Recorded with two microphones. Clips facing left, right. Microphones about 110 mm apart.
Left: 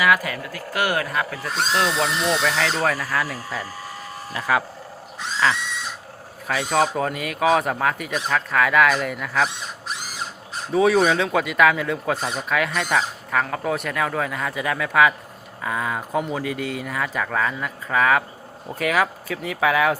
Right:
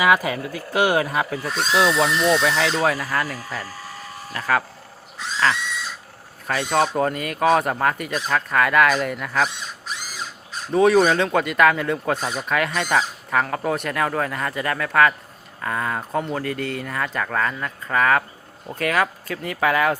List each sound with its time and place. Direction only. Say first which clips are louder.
0.0 s speech: right 2 dB; 20° right (ahead or behind)
1.5 s speech: right 3 dB; 5° right (ahead or behind)
10.7 s speech: right 2 dB; centre (ahead or behind)